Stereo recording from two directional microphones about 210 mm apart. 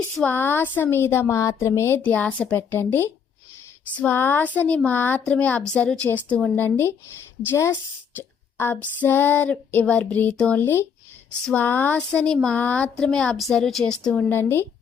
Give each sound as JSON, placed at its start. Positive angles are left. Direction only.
{"t": 0.2, "sound": "speech", "side_deg": 10}